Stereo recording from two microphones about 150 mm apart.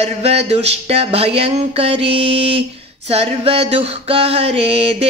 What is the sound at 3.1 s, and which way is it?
Music, 40° right (ahead or behind).